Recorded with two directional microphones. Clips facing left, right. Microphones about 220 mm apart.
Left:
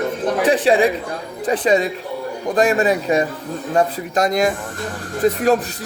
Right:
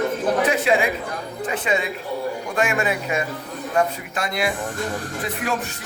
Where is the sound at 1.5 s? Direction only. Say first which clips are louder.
Left 8 dB; 35° left (ahead or behind).